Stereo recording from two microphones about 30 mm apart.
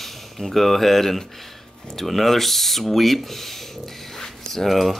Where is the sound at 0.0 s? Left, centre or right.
Centre.